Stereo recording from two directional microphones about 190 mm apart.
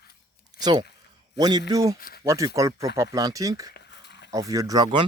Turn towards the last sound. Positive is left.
turn(degrees=-20)  # may be behind; listen again after turning